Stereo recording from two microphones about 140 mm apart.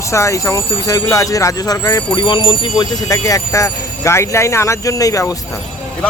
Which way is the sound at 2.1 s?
35° left (ahead or behind).